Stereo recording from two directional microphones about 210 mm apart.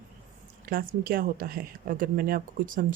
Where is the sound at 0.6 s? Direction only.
45° right (ahead or behind).